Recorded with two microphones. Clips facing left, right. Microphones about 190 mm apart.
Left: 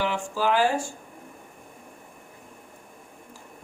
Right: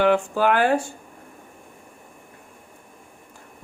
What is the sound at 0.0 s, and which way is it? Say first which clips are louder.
Speech: right 7 dB; 60° right (ahead or behind).